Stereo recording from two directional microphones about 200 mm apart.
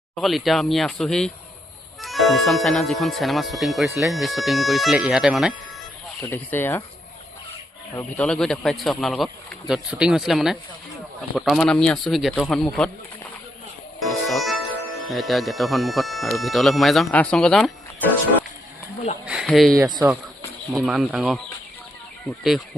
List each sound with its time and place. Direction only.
0.2 s speech: centre (ahead or behind)
6.2 s speech: 10° left (ahead or behind)
7.9 s speech: 5° left (ahead or behind)
14.0 s speech: centre (ahead or behind)
19.2 s speech: 5° right (ahead or behind)
19.7 s speech: 20° right (ahead or behind)
20.7 s speech: centre (ahead or behind)